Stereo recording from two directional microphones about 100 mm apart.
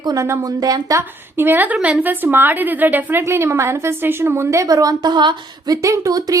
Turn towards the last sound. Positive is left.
turn(degrees=-35)  # may be behind; listen again after turning